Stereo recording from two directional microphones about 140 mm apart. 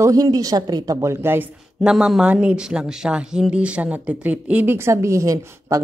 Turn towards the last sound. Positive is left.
turn(degrees=-20)  # may be behind; listen again after turning